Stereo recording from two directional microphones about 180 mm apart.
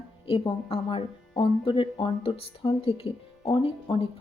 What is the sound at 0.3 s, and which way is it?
Speech, 30° left (ahead or behind).